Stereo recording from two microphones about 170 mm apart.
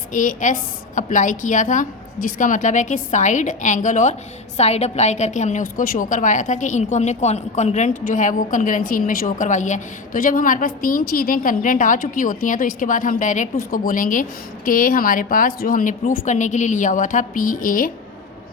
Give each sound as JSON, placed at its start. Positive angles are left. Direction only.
{"t": 0.1, "sound": "a woman's voice", "side_deg": 50}